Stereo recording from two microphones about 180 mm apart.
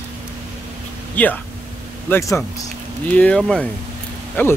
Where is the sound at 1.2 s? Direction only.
10° left (ahead or behind).